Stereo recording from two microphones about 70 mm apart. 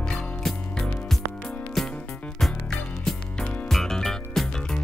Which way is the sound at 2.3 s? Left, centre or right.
Centre.